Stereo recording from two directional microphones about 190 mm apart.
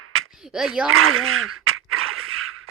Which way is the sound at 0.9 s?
90° right.